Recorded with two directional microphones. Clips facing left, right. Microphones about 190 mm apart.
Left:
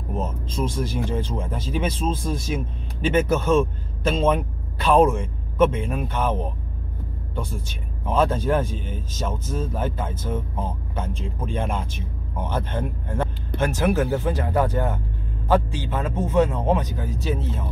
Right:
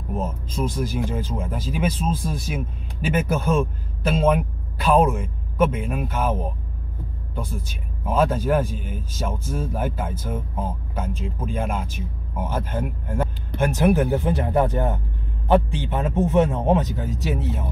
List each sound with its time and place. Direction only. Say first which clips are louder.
0.1 s speech: right 1 dB; 10° right (ahead or behind)
5.6 s speech: left 1 dB; 10° right (ahead or behind)
8.0 s a man's voice: even; 10° right (ahead or behind)